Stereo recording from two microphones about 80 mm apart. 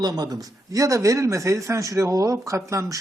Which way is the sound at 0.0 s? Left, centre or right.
Right.